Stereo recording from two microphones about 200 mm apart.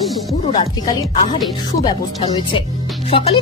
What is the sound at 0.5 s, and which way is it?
Speech, 20° left (ahead or behind).